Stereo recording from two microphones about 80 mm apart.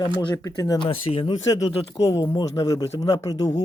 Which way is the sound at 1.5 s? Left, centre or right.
Left.